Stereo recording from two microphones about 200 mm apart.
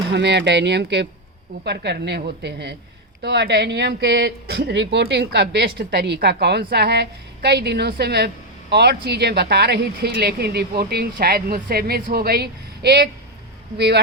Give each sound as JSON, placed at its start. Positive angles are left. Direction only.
{"t": 0.1, "sound": "a woman's voice", "side_deg": -60}